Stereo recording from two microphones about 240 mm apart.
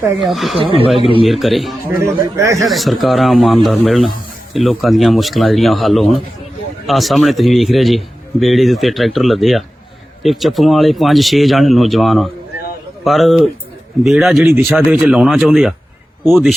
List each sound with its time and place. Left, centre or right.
0.2 s a man's voice: centre
0.6 s speech: right
0.9 s a man's voice: left
1.2 s a man's voice: centre
2.3 s speech: centre
2.6 s a man's voice: centre